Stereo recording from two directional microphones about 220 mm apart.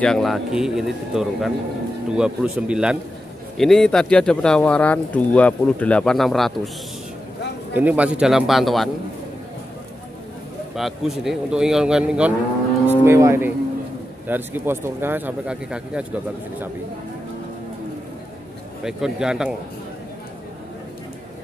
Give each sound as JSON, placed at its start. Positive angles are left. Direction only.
{"t": 0.0, "sound": "speech", "side_deg": 0}
{"t": 7.7, "sound": "speech", "side_deg": -5}
{"t": 10.8, "sound": "speech", "side_deg": 0}
{"t": 18.9, "sound": "speech", "side_deg": 0}